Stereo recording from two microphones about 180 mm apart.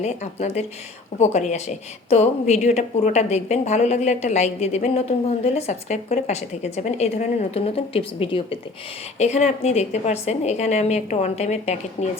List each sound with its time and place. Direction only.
0.0 s a woman's voice: 40° left (ahead or behind)